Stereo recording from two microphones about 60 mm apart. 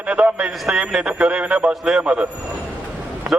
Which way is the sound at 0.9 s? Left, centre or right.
Centre.